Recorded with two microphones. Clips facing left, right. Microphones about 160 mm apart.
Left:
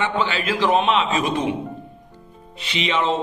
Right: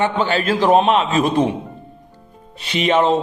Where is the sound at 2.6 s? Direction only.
45° right (ahead or behind).